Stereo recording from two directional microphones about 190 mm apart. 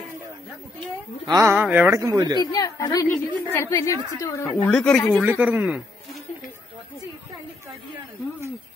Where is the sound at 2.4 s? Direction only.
20° left (ahead or behind).